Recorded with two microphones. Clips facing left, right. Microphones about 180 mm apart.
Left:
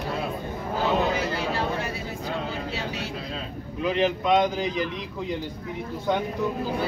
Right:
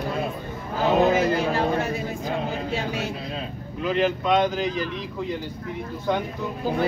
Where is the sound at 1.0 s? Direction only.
50° right (ahead or behind).